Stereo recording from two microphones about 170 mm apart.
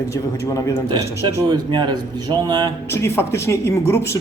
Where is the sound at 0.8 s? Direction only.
25° right (ahead or behind).